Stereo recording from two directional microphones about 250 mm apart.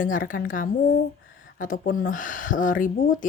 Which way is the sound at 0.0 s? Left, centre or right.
Left.